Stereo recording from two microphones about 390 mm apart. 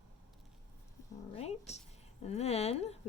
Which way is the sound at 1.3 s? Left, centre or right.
Centre.